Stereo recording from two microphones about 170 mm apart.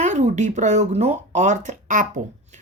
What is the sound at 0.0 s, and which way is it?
Speech, 45° right (ahead or behind).